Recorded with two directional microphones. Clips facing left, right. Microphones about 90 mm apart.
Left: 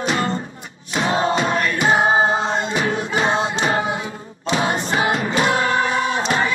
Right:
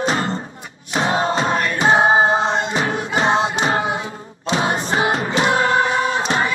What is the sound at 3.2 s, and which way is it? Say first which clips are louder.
Music: right 3 dB; 30° right (ahead or behind).